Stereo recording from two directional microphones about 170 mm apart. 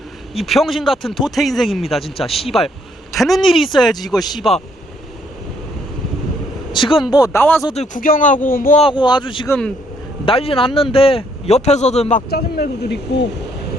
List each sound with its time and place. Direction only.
0.3 s a man's voice: centre (ahead or behind)
6.7 s speech: 30° left (ahead or behind)
7.4 s speech: 10° left (ahead or behind)
7.7 s speech: 40° left (ahead or behind)
8.0 s speech: 50° left (ahead or behind)
8.8 s speech: 30° left (ahead or behind)
9.5 s speech: 5° left (ahead or behind)
10.2 s speech: 35° left (ahead or behind)
12.3 s speech: 65° left (ahead or behind)